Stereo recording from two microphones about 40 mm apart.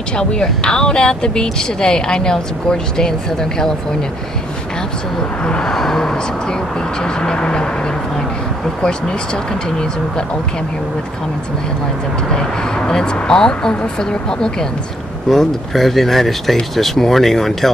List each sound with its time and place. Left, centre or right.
0.2 s speech: left
5.4 s speech: left
5.7 s speech: centre
8.8 s speech: left
12.3 s speech: centre
15.2 s speech: centre